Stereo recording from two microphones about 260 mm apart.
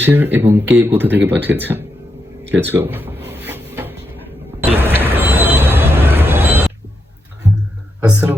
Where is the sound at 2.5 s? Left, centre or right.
Centre.